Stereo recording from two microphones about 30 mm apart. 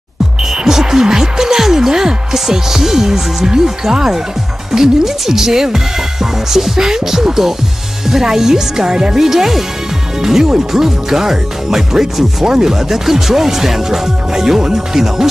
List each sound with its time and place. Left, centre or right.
0.4 s music: centre
2.3 s speech: centre